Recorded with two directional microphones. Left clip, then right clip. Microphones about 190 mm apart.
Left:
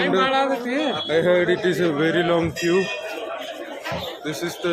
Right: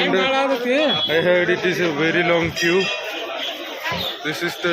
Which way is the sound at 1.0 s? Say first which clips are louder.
Right 2 dB; 10° left (ahead or behind).